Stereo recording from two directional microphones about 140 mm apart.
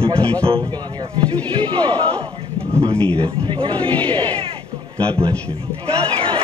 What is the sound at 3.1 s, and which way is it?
Speech, 40° right (ahead or behind).